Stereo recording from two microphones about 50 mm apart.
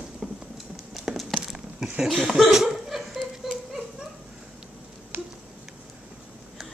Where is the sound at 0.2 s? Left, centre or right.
Centre.